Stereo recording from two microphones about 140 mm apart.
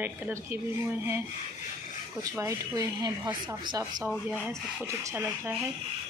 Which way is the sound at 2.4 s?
25° right (ahead or behind).